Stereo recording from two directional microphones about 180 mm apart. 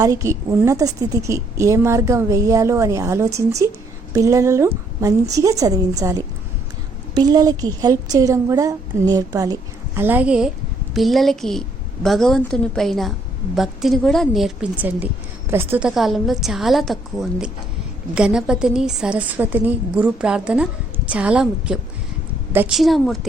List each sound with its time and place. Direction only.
0.0 s a woman's voice: 15° right (ahead or behind); by 23.2 s centre (ahead or behind)